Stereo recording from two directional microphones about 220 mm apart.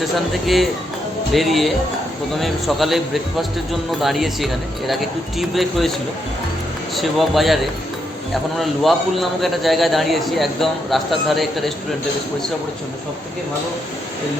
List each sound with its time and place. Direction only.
0.4 s a man's voice: centre (ahead or behind)
6.9 s a man's voice: centre (ahead or behind)